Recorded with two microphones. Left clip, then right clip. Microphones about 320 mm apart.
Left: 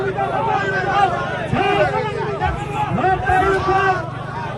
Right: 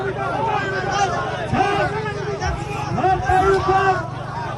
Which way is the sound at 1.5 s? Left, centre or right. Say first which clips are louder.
Left 1 dB; right.